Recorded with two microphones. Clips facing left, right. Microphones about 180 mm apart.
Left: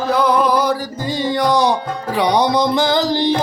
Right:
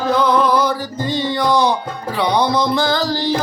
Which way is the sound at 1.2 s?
15° left (ahead or behind).